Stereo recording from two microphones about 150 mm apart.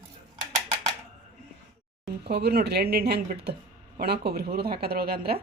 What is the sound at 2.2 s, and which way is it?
Speech, 90° right.